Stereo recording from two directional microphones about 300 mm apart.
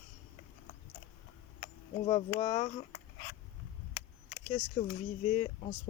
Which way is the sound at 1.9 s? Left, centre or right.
Centre.